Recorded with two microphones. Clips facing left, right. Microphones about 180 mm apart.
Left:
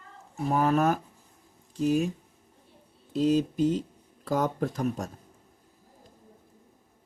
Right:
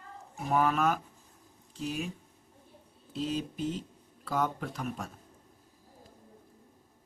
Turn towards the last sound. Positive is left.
turn(degrees=45)  # may be behind; listen again after turning